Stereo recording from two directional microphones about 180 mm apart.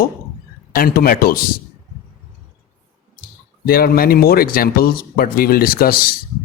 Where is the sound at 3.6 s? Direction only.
55° left (ahead or behind).